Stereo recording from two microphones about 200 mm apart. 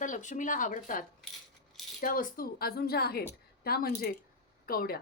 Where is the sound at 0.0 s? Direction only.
40° left (ahead or behind).